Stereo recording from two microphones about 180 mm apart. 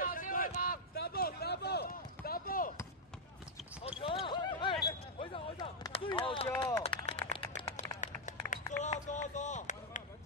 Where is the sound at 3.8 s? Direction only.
30° left (ahead or behind).